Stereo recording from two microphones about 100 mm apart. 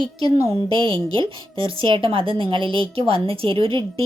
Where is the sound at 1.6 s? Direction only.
60° right (ahead or behind).